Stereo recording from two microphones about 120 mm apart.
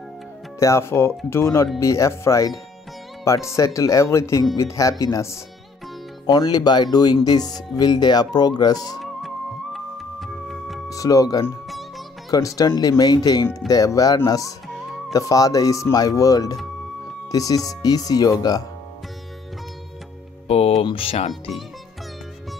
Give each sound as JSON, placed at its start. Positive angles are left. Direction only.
{"t": 0.6, "sound": "speech", "side_deg": 25}
{"t": 9.0, "sound": "music", "side_deg": 0}
{"t": 10.9, "sound": "speech", "side_deg": 30}
{"t": 20.4, "sound": "music", "side_deg": 55}
{"t": 20.8, "sound": "speech", "side_deg": 50}
{"t": 21.3, "sound": "speech", "side_deg": 0}